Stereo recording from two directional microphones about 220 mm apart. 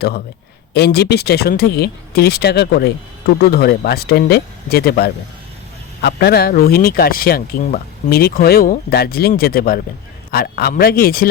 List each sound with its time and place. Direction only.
0.7 s speech: 45° left (ahead or behind)